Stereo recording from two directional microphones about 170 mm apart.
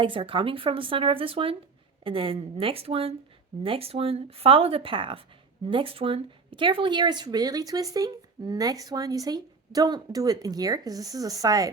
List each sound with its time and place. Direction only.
0.0 s speech: 30° right (ahead or behind)